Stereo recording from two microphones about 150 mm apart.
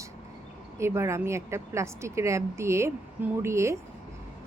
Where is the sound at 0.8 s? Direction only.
20° right (ahead or behind).